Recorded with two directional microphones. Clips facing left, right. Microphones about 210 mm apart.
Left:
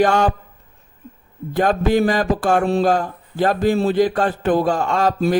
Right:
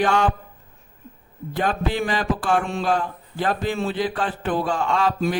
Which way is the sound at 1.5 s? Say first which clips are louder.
Left 7 dB; 45° left (ahead or behind).